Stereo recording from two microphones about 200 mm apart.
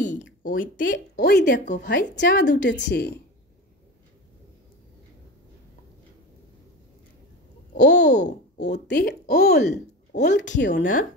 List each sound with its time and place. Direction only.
0.4 s speech: 45° left (ahead or behind)
0.9 s a woman's voice: 55° left (ahead or behind)
1.6 s speech: 40° left (ahead or behind)
1.9 s a woman's voice: 60° left (ahead or behind)
7.8 s a woman's voice: 60° left (ahead or behind)
8.2 s speech: 40° left (ahead or behind)
8.8 s speech: 55° left (ahead or behind)
9.6 s speech: 35° left (ahead or behind)